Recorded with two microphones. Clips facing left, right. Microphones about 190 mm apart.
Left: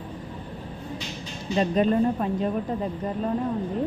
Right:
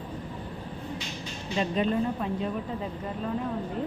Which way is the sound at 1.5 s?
45° left (ahead or behind).